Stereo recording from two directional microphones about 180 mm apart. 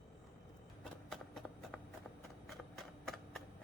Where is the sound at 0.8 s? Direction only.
Centre (ahead or behind).